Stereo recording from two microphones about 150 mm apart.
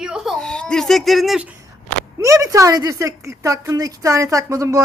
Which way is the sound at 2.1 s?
20° right (ahead or behind).